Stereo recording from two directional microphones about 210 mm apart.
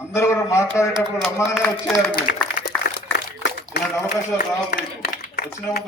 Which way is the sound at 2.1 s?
45° left (ahead or behind).